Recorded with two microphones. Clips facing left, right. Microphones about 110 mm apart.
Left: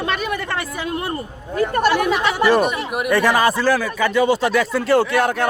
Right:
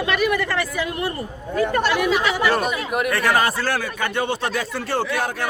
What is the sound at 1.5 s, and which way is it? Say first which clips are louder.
Speech: left 2 dB; 45° left (ahead or behind).